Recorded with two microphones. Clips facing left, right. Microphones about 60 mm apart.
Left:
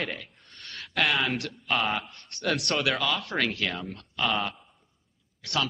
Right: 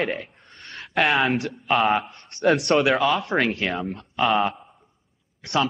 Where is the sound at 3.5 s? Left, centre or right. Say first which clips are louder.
Right 5 dB; right.